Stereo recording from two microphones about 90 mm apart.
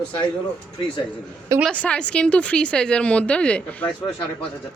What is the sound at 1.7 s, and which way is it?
Speech, 15° left (ahead or behind).